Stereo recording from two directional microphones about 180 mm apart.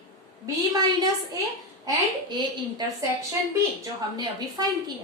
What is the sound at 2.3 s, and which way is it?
Speech, 25° right (ahead or behind).